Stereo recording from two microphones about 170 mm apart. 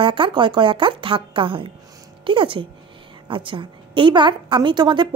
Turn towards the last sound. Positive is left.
turn(degrees=-25)  # may be behind; listen again after turning